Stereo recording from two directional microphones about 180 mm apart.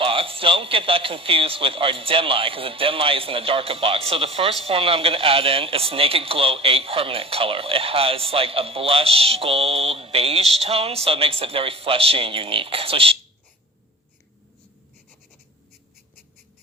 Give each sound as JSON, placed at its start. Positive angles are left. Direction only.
{"t": 0.0, "sound": "a man's voice", "side_deg": -30}